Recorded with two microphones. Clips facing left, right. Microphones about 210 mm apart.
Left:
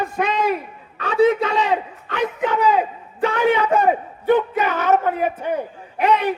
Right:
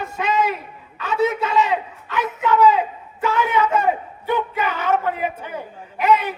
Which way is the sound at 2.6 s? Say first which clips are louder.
Right 2 dB; 40° left (ahead or behind).